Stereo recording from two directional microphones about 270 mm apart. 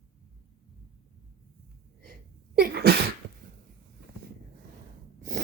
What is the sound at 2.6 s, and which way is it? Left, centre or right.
Sneeze, right.